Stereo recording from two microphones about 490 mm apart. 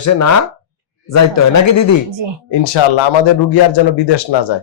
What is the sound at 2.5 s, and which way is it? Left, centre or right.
Speech, left.